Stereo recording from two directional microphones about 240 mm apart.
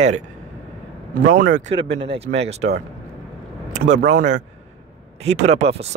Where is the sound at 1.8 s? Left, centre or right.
Right.